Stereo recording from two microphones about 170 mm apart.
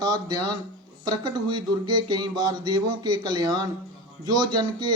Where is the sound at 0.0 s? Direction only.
25° right (ahead or behind).